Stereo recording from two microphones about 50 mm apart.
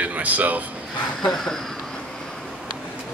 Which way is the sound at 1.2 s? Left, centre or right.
Centre.